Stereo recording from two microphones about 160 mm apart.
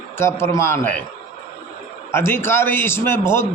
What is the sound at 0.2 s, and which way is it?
Speech, 15° left (ahead or behind).